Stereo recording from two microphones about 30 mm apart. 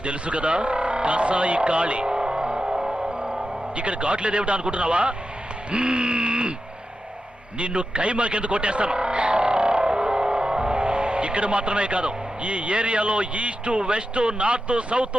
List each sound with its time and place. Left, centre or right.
0.0 s speech: right
2.0 s music: right
3.0 s speech: right
7.6 s speech: right